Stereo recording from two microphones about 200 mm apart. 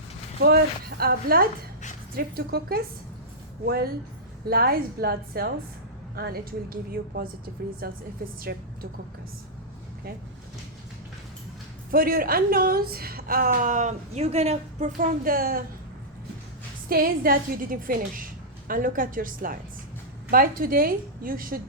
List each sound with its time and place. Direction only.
0.4 s a woman's voice: 50° right (ahead or behind)
4.4 s a woman's voice: 50° right (ahead or behind)
7.8 s a woman's voice: 50° right (ahead or behind)
11.9 s a woman's voice: 45° right (ahead or behind)
16.9 s a woman's voice: 45° right (ahead or behind)